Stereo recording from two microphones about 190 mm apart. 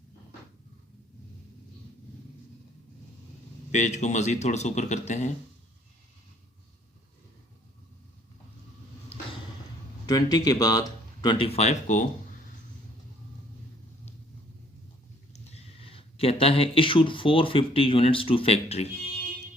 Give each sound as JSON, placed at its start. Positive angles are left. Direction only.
{"t": 3.7, "sound": "a man's voice", "side_deg": 40}
{"t": 10.1, "sound": "speech", "side_deg": 20}
{"t": 15.3, "sound": "speech", "side_deg": 35}